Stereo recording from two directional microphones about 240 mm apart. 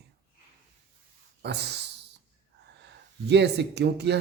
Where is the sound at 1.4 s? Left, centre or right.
Right.